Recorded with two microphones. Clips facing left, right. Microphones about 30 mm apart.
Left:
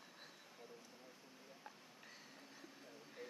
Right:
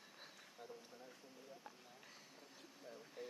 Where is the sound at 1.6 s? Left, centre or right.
Centre.